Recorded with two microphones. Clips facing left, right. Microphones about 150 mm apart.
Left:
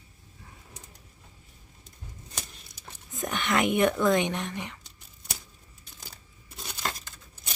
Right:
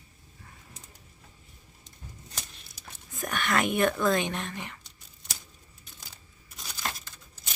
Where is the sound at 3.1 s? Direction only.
20° left (ahead or behind).